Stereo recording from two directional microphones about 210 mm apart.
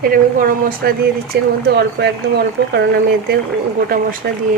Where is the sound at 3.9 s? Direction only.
45° right (ahead or behind).